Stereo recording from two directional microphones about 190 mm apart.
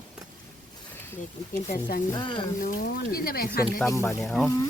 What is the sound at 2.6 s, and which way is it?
Speech, 45° left (ahead or behind).